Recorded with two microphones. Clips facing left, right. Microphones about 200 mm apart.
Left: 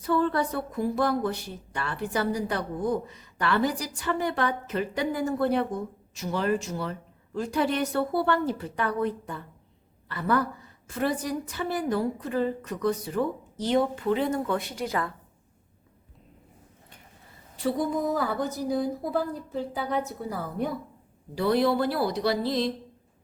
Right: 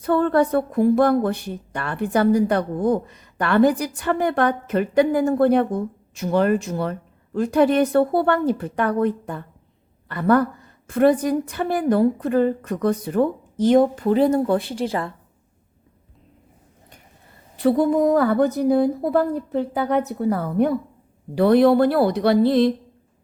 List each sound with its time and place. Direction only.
0.0 s a woman's voice: 55° right (ahead or behind); by 15.1 s 30° right (ahead or behind)
17.6 s speech: 60° right (ahead or behind)